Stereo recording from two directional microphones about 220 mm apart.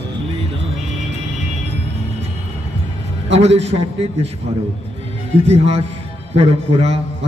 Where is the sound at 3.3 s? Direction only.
30° right (ahead or behind).